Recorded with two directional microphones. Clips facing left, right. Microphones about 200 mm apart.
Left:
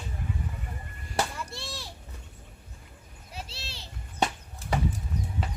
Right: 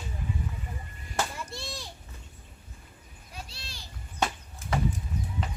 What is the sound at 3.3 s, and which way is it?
Children playing, 25° left (ahead or behind).